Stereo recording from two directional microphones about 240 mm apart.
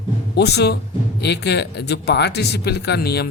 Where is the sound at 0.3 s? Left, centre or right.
Left.